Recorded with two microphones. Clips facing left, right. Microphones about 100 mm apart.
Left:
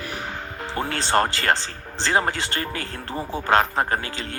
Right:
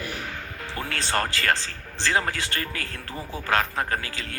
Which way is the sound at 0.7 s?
25° left (ahead or behind).